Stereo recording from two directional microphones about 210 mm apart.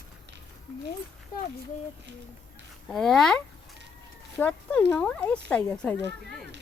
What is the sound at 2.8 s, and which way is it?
Speech, centre (ahead or behind).